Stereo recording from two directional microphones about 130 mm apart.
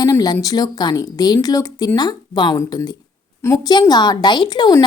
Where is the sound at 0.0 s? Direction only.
30° left (ahead or behind).